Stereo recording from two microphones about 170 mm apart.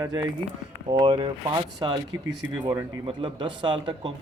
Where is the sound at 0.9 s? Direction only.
30° right (ahead or behind).